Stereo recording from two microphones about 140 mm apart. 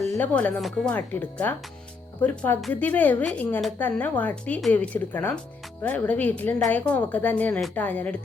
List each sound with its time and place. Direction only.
0.2 s a woman's voice: 10° left (ahead or behind)